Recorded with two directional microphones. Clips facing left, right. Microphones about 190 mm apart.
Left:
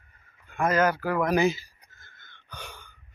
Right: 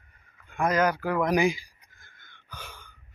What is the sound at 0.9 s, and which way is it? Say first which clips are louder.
Speech: even; 5° left (ahead or behind).